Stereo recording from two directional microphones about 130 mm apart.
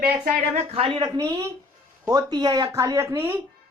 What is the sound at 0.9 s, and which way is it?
Speech, 30° right (ahead or behind).